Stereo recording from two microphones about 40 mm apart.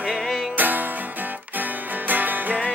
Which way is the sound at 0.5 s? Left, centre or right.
Right.